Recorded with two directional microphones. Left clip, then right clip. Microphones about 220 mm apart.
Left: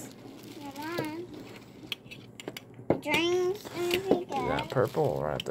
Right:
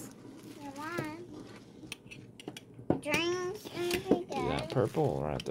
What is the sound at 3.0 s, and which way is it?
Child singing, 40° right (ahead or behind).